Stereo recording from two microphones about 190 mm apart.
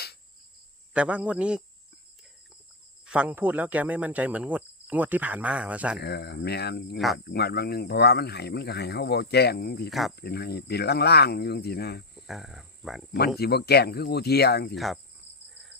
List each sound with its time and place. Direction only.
0.9 s speech: 5° right (ahead or behind)
3.1 s speech: 10° right (ahead or behind)
6.0 s speech: 60° left (ahead or behind)
6.9 s speech: centre (ahead or behind)
7.3 s speech: 55° left (ahead or behind)
12.3 s speech: centre (ahead or behind)
13.4 s speech: 55° left (ahead or behind)